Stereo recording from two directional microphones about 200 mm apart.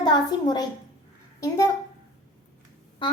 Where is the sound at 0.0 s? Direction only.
20° left (ahead or behind).